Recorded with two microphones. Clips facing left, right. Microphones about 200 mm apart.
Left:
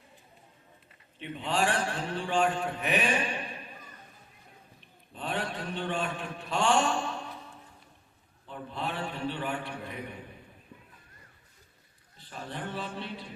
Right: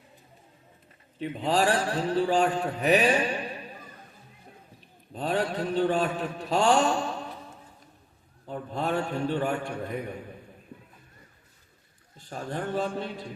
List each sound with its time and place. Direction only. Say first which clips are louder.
1.2 s a man's voice: right 5 dB; 40° right (ahead or behind)
5.1 s a man's voice: right 7 dB; 40° right (ahead or behind)
8.4 s a man's voice: right 6 dB; 45° right (ahead or behind)
12.1 s a man's voice: right 6 dB; 45° right (ahead or behind)